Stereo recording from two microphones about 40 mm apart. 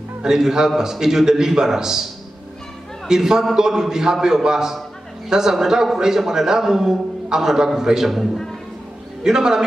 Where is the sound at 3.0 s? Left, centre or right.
Centre.